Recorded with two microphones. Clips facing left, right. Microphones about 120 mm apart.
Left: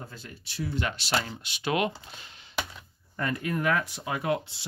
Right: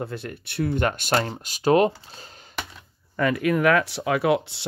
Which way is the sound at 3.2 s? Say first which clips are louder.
Right 8 dB; 90° right.